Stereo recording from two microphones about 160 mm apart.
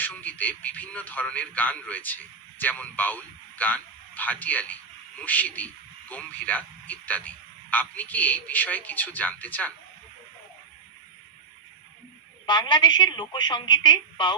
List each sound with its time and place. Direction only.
0.0 s speech: 10° left (ahead or behind)
12.5 s a woman's voice: 30° left (ahead or behind)